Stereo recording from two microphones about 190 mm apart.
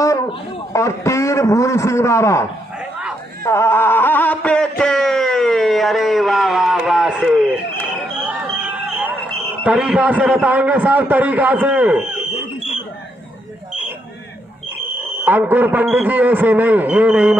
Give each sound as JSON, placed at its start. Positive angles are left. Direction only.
{"t": 0.0, "sound": "a man's voice", "side_deg": 15}
{"t": 3.4, "sound": "a sound", "side_deg": 15}
{"t": 9.7, "sound": "a man's voice", "side_deg": -5}
{"t": 15.2, "sound": "a man's voice", "side_deg": -10}